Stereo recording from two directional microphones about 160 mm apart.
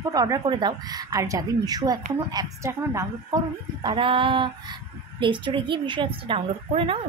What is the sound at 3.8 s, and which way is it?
Speech, 35° right (ahead or behind).